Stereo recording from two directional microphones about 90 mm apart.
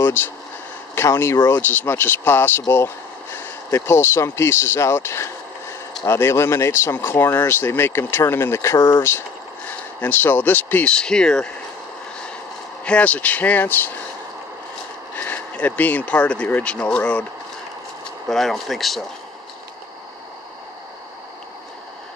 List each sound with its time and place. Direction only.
0.0 s a sound: 25° left (ahead or behind)
0.9 s speech: 30° left (ahead or behind)
9.7 s speech: 20° left (ahead or behind)
12.8 s speech: 15° left (ahead or behind)
15.1 s speech: 15° left (ahead or behind)
18.3 s speech: centre (ahead or behind)